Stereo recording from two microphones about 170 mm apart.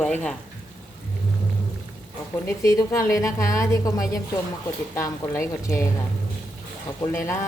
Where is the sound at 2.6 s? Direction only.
15° left (ahead or behind).